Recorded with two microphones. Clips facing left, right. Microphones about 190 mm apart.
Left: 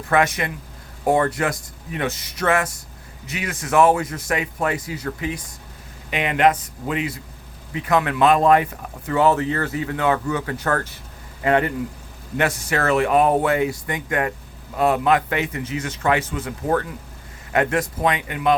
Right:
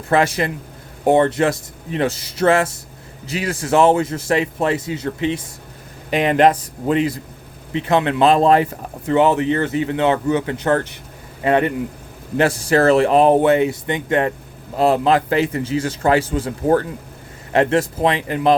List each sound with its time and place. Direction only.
0.1 s a man's voice: 30° right (ahead or behind)